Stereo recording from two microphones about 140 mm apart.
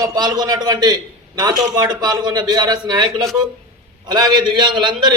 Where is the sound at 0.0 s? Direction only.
30° right (ahead or behind).